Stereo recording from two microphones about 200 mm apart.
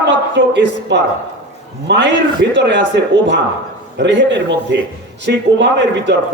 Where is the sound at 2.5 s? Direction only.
60° right (ahead or behind).